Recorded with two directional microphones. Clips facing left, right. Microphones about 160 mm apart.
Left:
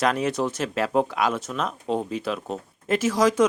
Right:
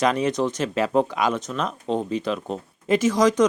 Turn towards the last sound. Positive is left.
turn(degrees=5)  # may be behind; listen again after turning